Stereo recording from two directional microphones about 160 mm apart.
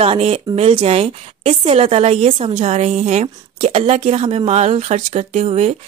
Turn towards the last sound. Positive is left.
turn(degrees=-45)  # may be behind; listen again after turning